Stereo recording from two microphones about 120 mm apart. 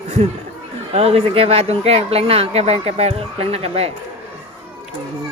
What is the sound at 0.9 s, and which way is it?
Speech, 55° right (ahead or behind).